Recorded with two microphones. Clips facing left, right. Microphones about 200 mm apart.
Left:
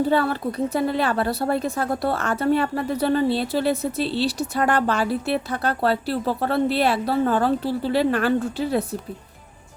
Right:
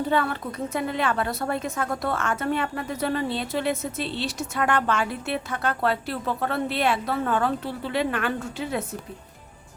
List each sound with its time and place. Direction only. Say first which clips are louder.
0.1 s a woman's voice: left 4 dB; 35° left (ahead or behind)